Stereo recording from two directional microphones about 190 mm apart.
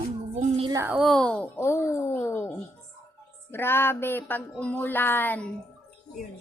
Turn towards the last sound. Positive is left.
turn(degrees=10)  # may be behind; listen again after turning